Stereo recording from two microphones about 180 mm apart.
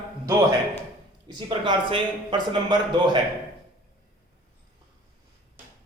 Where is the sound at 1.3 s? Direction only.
25° right (ahead or behind).